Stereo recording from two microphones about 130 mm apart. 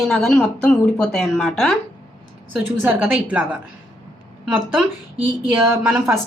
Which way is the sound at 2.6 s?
15° right (ahead or behind).